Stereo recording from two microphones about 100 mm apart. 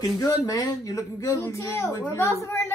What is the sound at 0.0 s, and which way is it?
A woman's voice, 35° left (ahead or behind).